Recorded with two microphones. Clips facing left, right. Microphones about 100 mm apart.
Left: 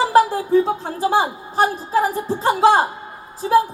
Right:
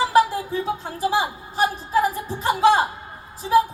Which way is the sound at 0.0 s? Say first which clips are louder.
Left 3 dB; 45° left (ahead or behind).